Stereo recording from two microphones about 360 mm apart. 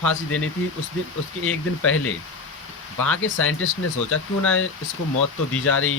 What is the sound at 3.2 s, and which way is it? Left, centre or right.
Speech, left.